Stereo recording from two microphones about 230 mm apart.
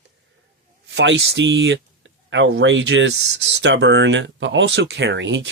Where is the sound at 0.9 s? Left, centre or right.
Right.